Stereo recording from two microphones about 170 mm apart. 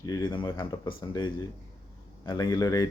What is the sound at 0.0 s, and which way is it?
Speech, 25° left (ahead or behind).